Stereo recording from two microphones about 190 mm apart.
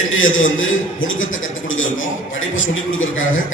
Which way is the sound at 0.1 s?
90° left.